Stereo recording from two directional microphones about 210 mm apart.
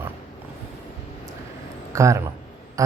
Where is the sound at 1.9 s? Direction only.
15° right (ahead or behind).